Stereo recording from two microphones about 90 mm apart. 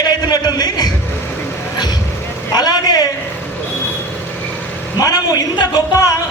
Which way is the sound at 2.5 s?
50° left (ahead or behind).